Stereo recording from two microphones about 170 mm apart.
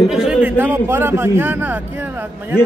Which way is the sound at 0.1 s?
5° right (ahead or behind).